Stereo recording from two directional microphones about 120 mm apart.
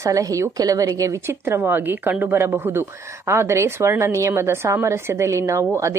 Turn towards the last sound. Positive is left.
turn(degrees=-25)  # may be behind; listen again after turning